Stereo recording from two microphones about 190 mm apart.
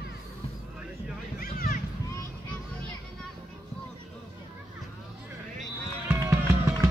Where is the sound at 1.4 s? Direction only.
45° left (ahead or behind).